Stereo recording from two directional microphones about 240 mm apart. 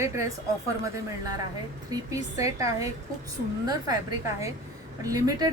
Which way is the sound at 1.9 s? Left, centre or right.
Centre.